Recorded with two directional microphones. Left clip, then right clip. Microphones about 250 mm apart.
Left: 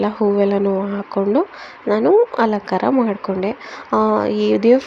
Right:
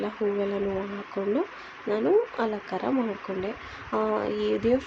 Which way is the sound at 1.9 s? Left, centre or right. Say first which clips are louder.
Left 10 dB; left.